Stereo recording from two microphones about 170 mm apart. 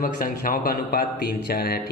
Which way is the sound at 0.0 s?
55° left (ahead or behind).